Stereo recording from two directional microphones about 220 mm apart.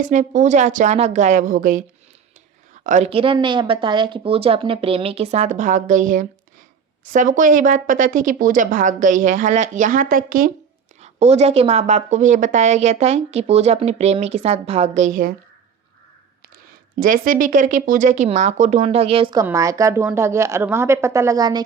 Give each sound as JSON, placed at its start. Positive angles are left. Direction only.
{"t": 0.0, "sound": "a woman's voice", "side_deg": -35}
{"t": 2.8, "sound": "a woman's voice", "side_deg": -30}
{"t": 11.0, "sound": "speech", "side_deg": -30}
{"t": 17.0, "sound": "a woman's voice", "side_deg": -40}